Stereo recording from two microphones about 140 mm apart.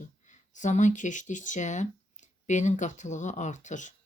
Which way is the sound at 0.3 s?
60° left (ahead or behind).